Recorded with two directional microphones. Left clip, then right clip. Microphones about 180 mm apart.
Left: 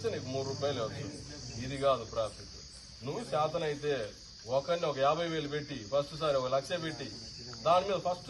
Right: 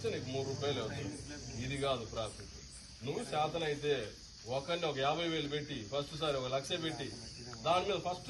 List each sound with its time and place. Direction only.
0.0 s a man's voice: 20° left (ahead or behind)